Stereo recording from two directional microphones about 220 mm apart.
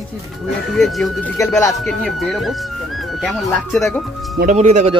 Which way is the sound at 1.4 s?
15° left (ahead or behind).